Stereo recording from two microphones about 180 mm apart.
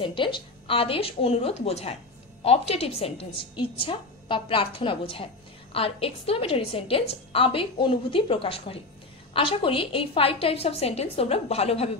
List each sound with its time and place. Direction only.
0.0 s a woman's voice: 30° left (ahead or behind)